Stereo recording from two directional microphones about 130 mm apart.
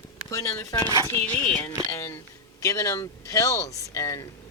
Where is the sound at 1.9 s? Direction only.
20° left (ahead or behind).